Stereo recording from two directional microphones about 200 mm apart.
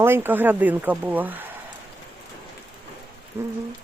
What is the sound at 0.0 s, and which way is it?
Speech, 10° right (ahead or behind).